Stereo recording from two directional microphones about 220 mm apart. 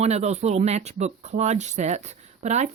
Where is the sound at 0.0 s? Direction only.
30° right (ahead or behind).